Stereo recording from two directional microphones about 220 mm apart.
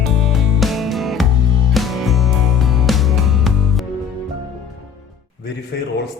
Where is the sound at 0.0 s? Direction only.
Centre (ahead or behind).